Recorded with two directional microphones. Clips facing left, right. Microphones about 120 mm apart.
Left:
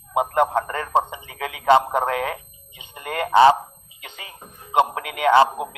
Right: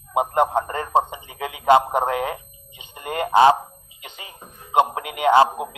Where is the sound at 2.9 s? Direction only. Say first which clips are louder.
Right 1 dB; 30° right (ahead or behind).